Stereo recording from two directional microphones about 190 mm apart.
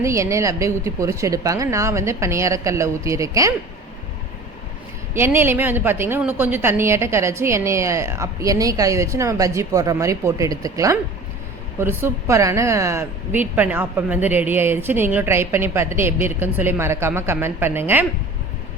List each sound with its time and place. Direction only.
0.0 s a woman's voice: 15° right (ahead or behind)
5.1 s a woman's voice: 10° right (ahead or behind)